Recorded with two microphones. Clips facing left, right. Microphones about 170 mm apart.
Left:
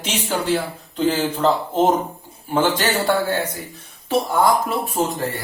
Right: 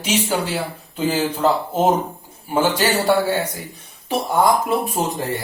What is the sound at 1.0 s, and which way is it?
A man's voice, 10° right (ahead or behind).